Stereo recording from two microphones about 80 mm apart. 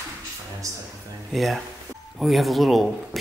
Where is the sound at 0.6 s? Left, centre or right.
Right.